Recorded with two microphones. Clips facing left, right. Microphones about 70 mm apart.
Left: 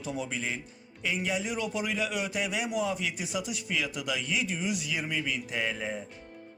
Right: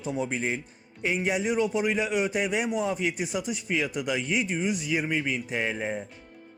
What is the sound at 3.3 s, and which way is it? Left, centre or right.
Speech, centre.